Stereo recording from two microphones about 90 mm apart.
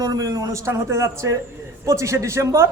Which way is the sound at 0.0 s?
40° right (ahead or behind).